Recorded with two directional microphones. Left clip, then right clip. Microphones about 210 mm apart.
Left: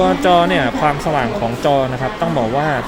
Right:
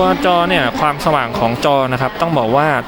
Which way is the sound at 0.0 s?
5° right (ahead or behind).